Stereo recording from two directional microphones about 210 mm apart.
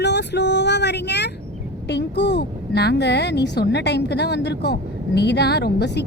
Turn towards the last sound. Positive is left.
turn(degrees=50)  # may be behind; listen again after turning